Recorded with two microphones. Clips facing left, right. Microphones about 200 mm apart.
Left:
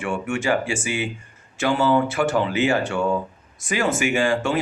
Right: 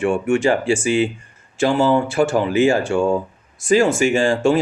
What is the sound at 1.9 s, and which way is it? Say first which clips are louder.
Speech: right 3 dB; 30° right (ahead or behind).